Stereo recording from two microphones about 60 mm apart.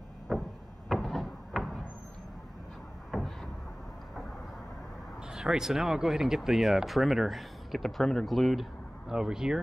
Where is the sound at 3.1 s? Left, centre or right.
Centre.